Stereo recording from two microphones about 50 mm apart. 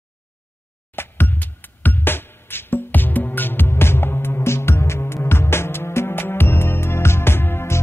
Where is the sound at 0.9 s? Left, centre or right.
Left.